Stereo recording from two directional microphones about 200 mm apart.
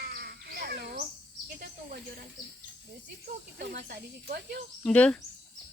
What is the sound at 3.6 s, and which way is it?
Speech, 50° right (ahead or behind).